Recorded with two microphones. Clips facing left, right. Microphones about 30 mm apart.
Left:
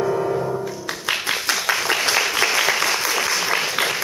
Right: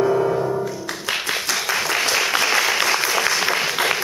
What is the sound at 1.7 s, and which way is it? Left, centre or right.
Applause, left.